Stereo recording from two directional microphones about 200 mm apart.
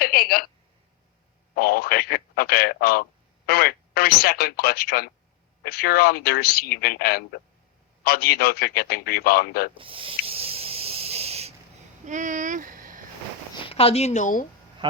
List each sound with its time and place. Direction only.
0.0 s a sound: 50° left (ahead or behind)
1.5 s a man's voice: 50° left (ahead or behind)
9.7 s snake: 25° right (ahead or behind)
12.0 s speech: 40° right (ahead or behind)
13.6 s a woman's voice: 30° left (ahead or behind)